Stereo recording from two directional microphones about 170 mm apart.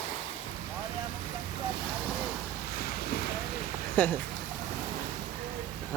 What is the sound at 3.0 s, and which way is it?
Boat, 60° left (ahead or behind).